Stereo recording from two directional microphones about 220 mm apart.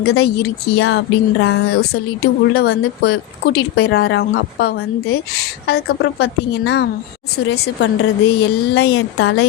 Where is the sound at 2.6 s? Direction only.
45° left (ahead or behind).